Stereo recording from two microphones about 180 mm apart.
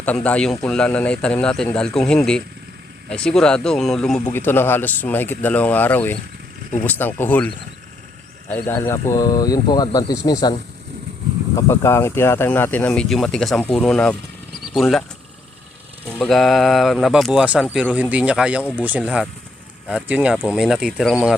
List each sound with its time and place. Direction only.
0.0 s speech: 10° left (ahead or behind)
11.5 s speech: 15° left (ahead or behind)
16.1 s speech: 5° left (ahead or behind)